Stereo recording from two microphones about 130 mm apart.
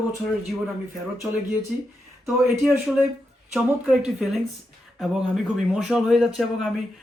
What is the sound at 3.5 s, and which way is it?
A man's voice, 5° right (ahead or behind).